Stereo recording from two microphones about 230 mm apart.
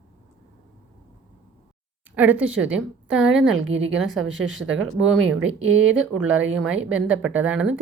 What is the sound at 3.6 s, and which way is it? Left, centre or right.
Speech, right.